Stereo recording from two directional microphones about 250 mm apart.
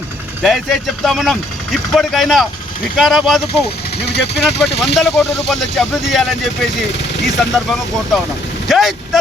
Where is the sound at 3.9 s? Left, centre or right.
Left.